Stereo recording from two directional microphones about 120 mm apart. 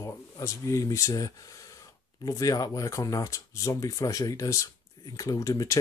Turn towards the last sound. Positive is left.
turn(degrees=25)  # may be behind; listen again after turning